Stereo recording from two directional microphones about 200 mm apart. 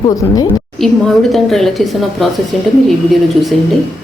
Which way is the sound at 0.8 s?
Centre (ahead or behind).